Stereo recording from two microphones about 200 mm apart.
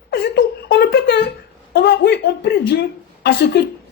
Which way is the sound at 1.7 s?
50° left (ahead or behind).